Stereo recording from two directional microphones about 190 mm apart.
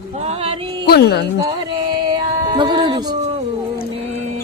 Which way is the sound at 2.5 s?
25° right (ahead or behind).